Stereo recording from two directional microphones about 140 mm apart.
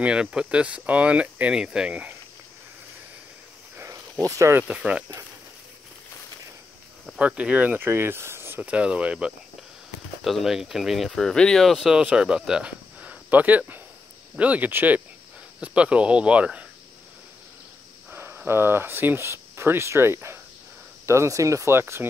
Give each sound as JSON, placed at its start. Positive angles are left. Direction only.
{"t": 0.0, "sound": "speech", "side_deg": -5}
{"t": 3.7, "sound": "a sound", "side_deg": -20}
{"t": 4.6, "sound": "speech", "side_deg": -5}
{"t": 7.1, "sound": "speech", "side_deg": -10}
{"t": 18.1, "sound": "speech", "side_deg": -15}